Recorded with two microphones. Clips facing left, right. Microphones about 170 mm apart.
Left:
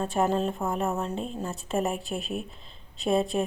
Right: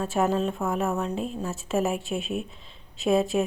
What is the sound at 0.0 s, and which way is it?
A woman's voice, 5° right (ahead or behind).